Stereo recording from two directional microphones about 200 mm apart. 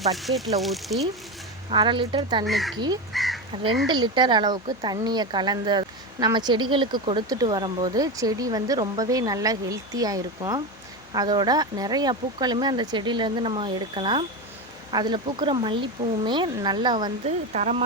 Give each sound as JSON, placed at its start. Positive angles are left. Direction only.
{"t": 0.2, "sound": "speech", "side_deg": 0}
{"t": 1.7, "sound": "speech", "side_deg": -25}
{"t": 2.5, "sound": "speech", "side_deg": 0}
{"t": 2.7, "sound": "speech", "side_deg": -20}
{"t": 3.1, "sound": "crow", "side_deg": 0}
{"t": 3.5, "sound": "speech", "side_deg": -25}
{"t": 17.2, "sound": "speech", "side_deg": -35}